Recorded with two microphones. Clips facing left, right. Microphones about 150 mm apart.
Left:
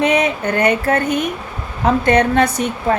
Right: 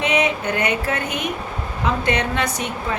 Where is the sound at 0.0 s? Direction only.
45° left (ahead or behind).